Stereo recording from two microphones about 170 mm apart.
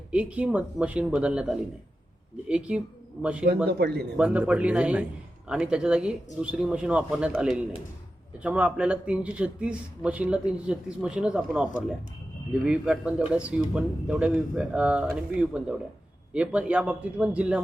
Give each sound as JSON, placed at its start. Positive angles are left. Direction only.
{"t": 0.1, "sound": "a man's voice", "side_deg": -5}
{"t": 3.7, "sound": "speech", "side_deg": -70}
{"t": 4.2, "sound": "a man's voice", "side_deg": -5}